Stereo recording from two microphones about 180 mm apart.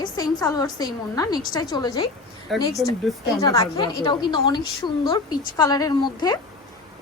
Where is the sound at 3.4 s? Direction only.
20° left (ahead or behind).